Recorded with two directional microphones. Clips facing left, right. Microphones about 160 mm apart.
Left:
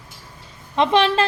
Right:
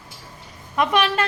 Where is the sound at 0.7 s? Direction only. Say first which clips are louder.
Left 3 dB; 25° left (ahead or behind).